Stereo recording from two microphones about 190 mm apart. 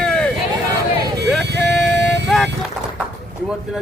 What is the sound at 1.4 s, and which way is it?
Music, 65° right (ahead or behind).